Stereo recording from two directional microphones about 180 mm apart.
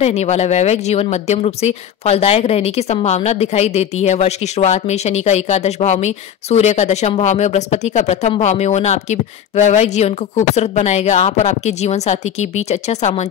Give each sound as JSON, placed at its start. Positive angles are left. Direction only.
{"t": 0.0, "sound": "speech", "side_deg": 40}